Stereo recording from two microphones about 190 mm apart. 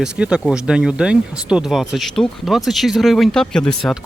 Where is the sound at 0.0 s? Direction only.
5° right (ahead or behind).